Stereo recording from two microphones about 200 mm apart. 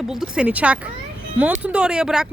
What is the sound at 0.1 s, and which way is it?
Speech, 5° right (ahead or behind).